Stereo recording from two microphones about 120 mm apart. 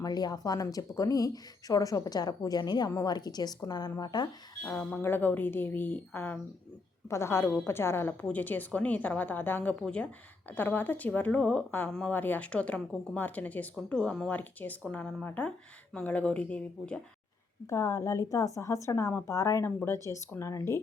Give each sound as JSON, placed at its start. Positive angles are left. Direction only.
{"t": 0.0, "sound": "speech", "side_deg": 35}
{"t": 4.6, "sound": "speech", "side_deg": 10}
{"t": 17.7, "sound": "speech", "side_deg": 25}